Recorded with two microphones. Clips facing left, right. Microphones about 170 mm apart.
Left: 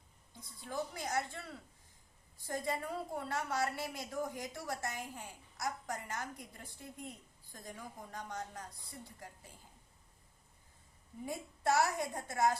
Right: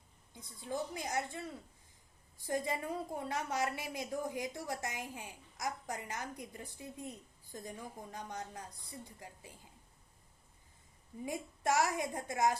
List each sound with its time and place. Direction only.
0.3 s a woman's voice: 20° right (ahead or behind)
2.5 s a woman's voice: 15° right (ahead or behind)
11.3 s a woman's voice: 15° right (ahead or behind)